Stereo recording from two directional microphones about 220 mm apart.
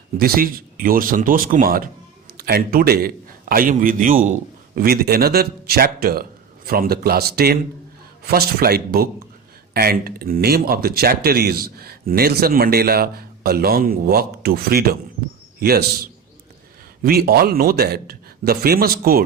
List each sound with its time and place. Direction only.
0.2 s a man's voice: 40° right (ahead or behind)
17.0 s speech: 45° right (ahead or behind)